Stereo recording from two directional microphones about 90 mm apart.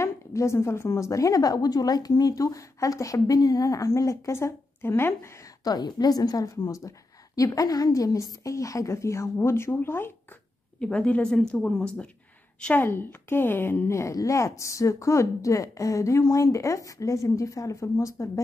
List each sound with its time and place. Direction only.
0.0 s a woman's voice: 35° left (ahead or behind)
5.6 s a woman's voice: 50° left (ahead or behind); by 10.1 s 25° left (ahead or behind)
10.8 s a woman's voice: 10° left (ahead or behind)
12.8 s a woman's voice: 25° left (ahead or behind)